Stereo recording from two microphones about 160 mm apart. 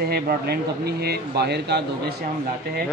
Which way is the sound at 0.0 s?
80° right.